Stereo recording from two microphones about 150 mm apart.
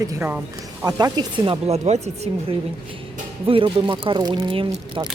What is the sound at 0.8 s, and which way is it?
Speech, 25° right (ahead or behind).